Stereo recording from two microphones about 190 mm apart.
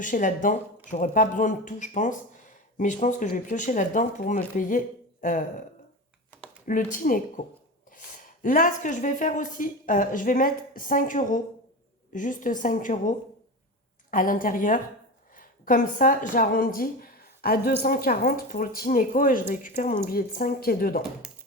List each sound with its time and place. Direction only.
0.0 s speech: 45° left (ahead or behind)
6.7 s speech: 45° left (ahead or behind)